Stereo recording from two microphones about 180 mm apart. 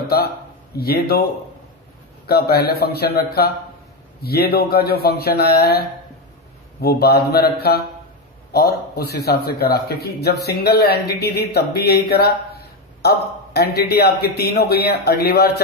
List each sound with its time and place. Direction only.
0.7 s a man's voice: 60° left (ahead or behind)
2.2 s a man's voice: 60° left (ahead or behind)